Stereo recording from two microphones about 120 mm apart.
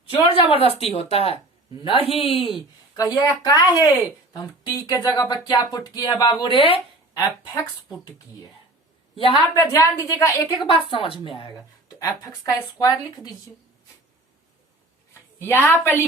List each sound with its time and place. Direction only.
0.1 s a woman's voice: 50° left (ahead or behind)
2.9 s speech: 30° left (ahead or behind)
4.9 s speech: 30° left (ahead or behind); by 6.7 s 45° left (ahead or behind)
7.2 s speech: 30° left (ahead or behind)
9.1 s a woman's voice: 50° left (ahead or behind)
9.6 s speech: 25° left (ahead or behind)
10.7 s a woman's voice: 50° left (ahead or behind)
11.5 s speech: 30° left (ahead or behind)
15.4 s a woman's voice: 15° left (ahead or behind)